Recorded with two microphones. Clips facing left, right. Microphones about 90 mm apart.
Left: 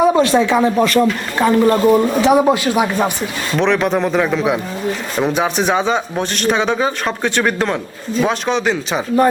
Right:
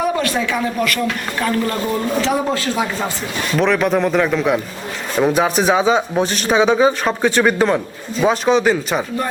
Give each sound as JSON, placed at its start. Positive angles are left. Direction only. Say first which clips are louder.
{"t": 0.0, "sound": "speech", "louder": "left 6 dB", "side_deg": 25}
{"t": 3.6, "sound": "speech", "louder": "even", "side_deg": 0}